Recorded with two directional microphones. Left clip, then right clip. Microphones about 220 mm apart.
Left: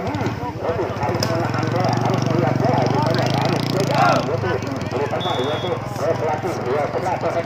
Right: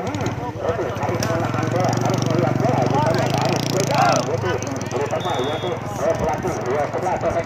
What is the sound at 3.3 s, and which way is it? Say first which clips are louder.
Vehicle: even; 25° right (ahead or behind).